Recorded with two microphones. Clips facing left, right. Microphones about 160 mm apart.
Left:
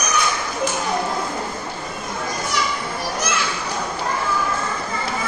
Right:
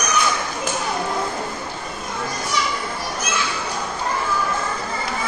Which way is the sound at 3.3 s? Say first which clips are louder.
Even; 70° left (ahead or behind).